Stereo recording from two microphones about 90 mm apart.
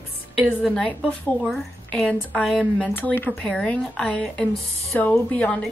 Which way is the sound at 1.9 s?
10° left (ahead or behind).